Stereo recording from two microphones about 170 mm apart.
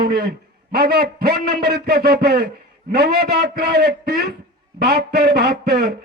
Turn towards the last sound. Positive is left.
turn(degrees=-70)  # may be behind; listen again after turning